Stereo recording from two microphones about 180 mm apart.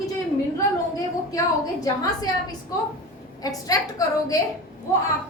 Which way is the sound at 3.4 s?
20° left (ahead or behind).